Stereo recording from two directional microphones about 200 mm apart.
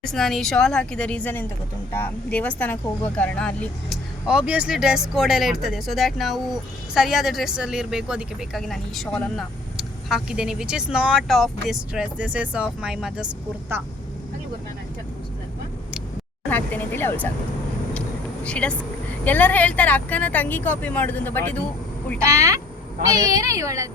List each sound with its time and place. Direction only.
0.0 s speech: centre (ahead or behind)
16.5 s speech: 10° left (ahead or behind)
18.4 s speech: 5° left (ahead or behind)
22.2 s speech: 15° right (ahead or behind)